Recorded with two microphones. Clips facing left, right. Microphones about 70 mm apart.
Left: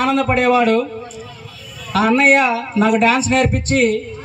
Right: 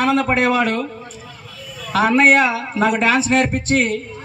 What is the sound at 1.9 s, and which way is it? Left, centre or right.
A man's voice, right.